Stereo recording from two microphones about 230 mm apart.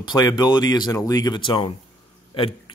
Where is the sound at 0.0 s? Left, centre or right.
Centre.